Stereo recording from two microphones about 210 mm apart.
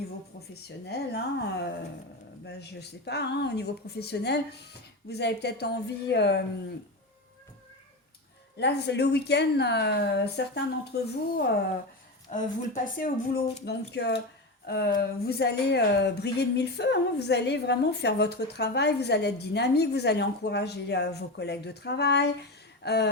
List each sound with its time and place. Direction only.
0.9 s speech: 50° left (ahead or behind)
8.5 s speech: 55° left (ahead or behind)
12.3 s speech: 35° left (ahead or behind); by 23.0 s 50° left (ahead or behind)